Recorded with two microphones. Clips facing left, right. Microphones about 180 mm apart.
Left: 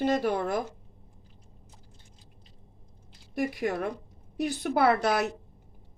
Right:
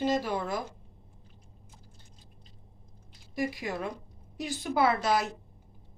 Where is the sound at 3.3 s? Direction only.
60° left (ahead or behind).